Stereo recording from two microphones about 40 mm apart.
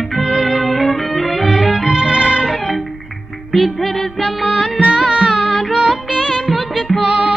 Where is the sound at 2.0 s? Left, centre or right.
Right.